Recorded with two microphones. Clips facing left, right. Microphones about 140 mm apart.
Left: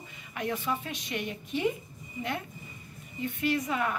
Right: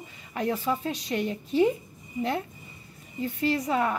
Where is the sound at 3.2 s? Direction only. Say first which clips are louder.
Right 3 dB; 35° right (ahead or behind).